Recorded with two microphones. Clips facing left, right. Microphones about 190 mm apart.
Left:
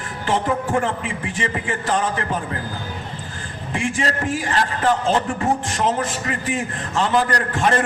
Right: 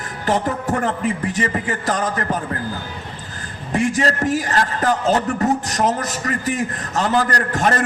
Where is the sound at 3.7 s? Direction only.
40° right (ahead or behind).